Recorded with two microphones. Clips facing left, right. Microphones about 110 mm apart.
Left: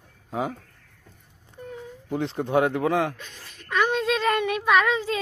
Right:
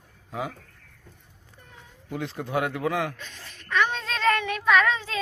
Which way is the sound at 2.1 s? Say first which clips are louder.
Left 5 dB; 25° left (ahead or behind).